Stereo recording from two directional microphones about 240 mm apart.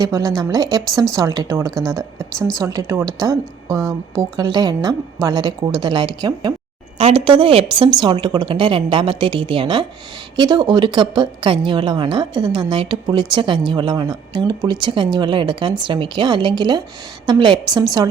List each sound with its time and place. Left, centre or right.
0.0 s a woman's voice: centre